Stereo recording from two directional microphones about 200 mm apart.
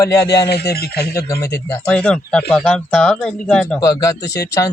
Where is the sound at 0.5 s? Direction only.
50° left (ahead or behind).